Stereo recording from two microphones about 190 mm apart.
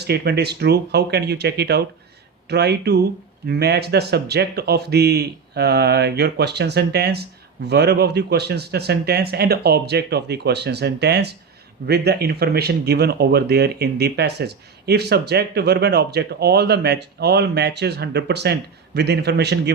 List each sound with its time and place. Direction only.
0.0 s speech: 60° right (ahead or behind)